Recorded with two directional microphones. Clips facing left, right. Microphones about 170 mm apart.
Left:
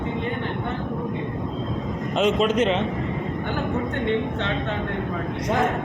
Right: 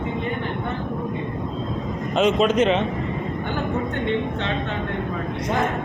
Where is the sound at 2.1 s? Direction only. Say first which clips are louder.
Right 2 dB; 80° right.